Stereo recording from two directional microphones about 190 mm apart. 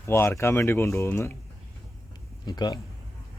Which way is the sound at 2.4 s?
20° left (ahead or behind).